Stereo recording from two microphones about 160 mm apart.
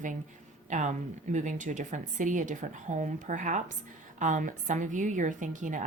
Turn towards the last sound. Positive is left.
turn(degrees=-50)  # may be behind; listen again after turning